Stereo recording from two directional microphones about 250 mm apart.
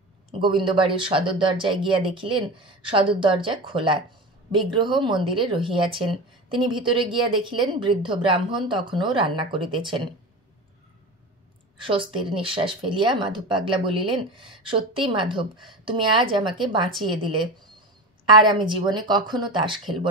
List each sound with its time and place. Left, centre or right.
0.3 s a woman's voice: centre
11.8 s a woman's voice: right
18.4 s speech: centre